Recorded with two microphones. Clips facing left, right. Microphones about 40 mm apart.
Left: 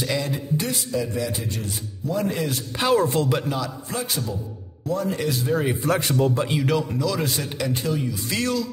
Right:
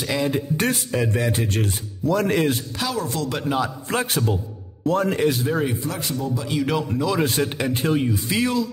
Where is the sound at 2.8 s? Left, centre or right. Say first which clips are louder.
Left 5 dB; left.